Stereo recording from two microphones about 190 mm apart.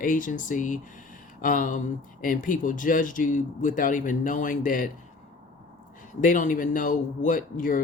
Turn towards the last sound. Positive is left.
turn(degrees=45)  # may be behind; listen again after turning